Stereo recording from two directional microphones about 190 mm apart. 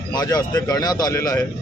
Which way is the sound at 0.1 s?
20° left (ahead or behind).